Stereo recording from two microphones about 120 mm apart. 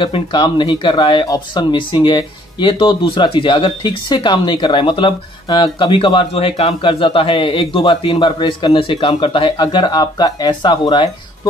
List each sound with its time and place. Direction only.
0.0 s speech: 40° left (ahead or behind)